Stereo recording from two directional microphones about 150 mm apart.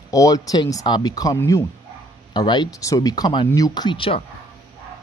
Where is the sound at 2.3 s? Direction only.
30° left (ahead or behind).